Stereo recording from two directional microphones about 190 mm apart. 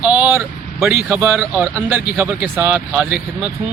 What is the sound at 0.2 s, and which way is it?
Vehicle, 10° right (ahead or behind).